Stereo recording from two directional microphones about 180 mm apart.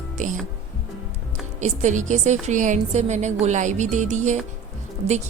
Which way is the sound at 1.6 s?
40° right (ahead or behind).